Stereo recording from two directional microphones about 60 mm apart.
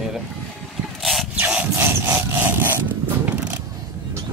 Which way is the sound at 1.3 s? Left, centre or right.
Right.